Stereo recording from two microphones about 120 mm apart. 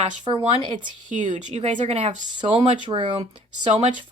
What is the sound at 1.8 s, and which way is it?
Speech, 65° right (ahead or behind).